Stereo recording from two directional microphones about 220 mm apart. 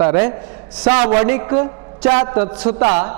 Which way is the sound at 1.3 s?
10° right (ahead or behind).